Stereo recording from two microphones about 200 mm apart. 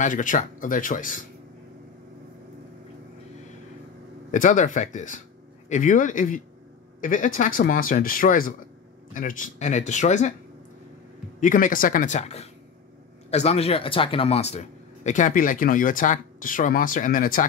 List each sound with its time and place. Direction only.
0.0 s speech: 40° left (ahead or behind)
4.3 s speech: 40° left (ahead or behind)
11.3 s speech: 40° left (ahead or behind)